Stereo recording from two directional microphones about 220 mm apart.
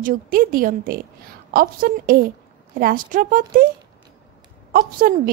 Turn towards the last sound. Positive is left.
turn(degrees=-40)  # may be behind; listen again after turning